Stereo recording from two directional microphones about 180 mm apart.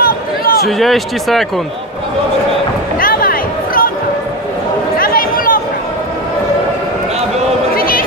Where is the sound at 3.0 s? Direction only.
55° left (ahead or behind).